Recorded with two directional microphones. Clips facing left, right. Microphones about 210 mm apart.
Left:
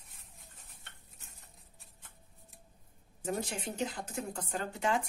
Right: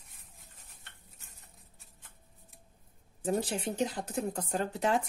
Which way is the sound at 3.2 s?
35° right (ahead or behind).